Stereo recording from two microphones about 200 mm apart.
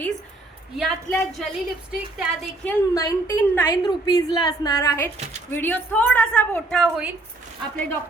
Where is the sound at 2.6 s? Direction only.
15° left (ahead or behind); by 7.1 s centre (ahead or behind).